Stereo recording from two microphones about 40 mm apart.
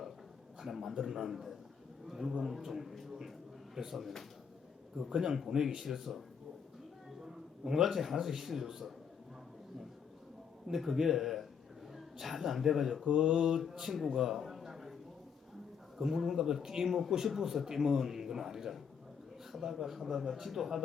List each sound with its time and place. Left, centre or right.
0.6 s a man's voice: centre
2.9 s music: centre
3.8 s a man's voice: centre
10.7 s a man's voice: centre
13.1 s mantra: right
13.5 s a man's voice: centre
16.0 s a man's voice: centre